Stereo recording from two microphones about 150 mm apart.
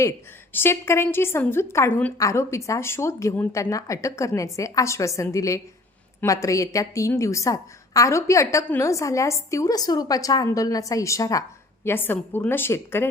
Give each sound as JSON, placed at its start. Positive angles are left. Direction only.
{"t": 0.5, "sound": "a woman's voice", "side_deg": 15}